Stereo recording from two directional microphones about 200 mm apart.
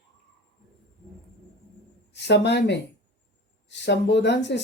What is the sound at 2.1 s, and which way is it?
Speech, 60° left (ahead or behind).